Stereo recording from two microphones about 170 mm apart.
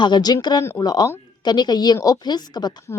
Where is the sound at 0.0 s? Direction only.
25° left (ahead or behind).